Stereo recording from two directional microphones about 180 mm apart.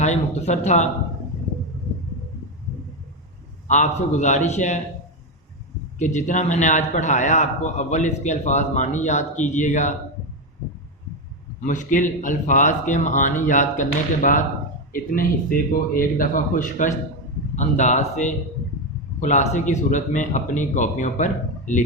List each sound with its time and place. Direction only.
0.0 s speech: 40° left (ahead or behind)
3.7 s a man's voice: 40° left (ahead or behind)
6.0 s a man's voice: 40° left (ahead or behind)
11.6 s a man's voice: 45° left (ahead or behind)